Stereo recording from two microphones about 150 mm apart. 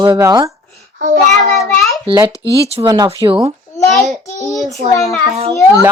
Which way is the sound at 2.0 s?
30° right (ahead or behind).